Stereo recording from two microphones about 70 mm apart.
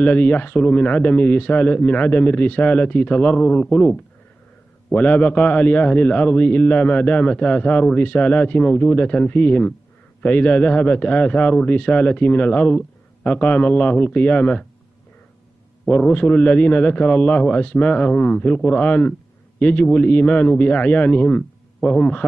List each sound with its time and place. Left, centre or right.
0.0 s a man's voice: left
15.9 s a man's voice: centre